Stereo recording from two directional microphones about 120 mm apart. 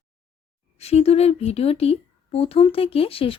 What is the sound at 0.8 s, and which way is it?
Speech, 60° left (ahead or behind).